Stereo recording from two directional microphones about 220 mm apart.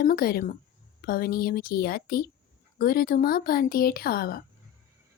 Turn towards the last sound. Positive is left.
turn(degrees=45)  # may be behind; listen again after turning